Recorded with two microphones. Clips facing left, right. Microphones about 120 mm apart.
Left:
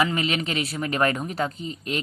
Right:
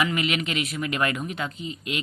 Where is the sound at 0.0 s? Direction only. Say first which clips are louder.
Left 1 dB; 30° left (ahead or behind).